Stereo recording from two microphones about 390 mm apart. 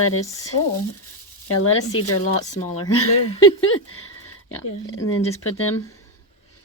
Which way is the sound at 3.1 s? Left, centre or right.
Centre.